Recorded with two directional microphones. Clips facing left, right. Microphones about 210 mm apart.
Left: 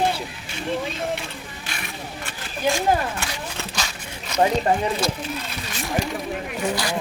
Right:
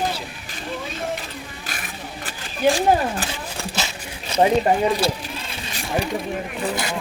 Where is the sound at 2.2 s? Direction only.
35° right (ahead or behind).